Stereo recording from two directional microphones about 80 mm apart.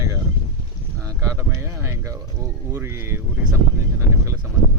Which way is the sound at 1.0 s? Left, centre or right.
Right.